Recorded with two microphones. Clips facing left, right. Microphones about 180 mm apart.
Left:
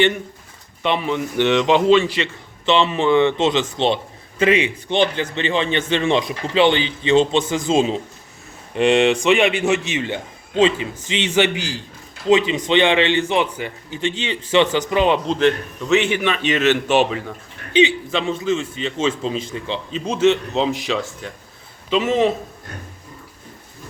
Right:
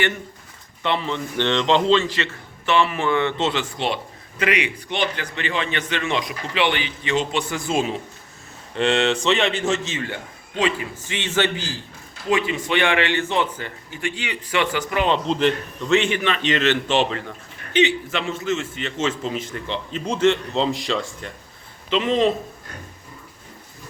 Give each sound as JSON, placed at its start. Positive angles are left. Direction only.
{"t": 0.8, "sound": "a man's voice", "side_deg": 15}
{"t": 15.3, "sound": "a man's voice", "side_deg": -5}
{"t": 16.0, "sound": "a man's voice", "side_deg": 15}
{"t": 20.7, "sound": "a man's voice", "side_deg": 5}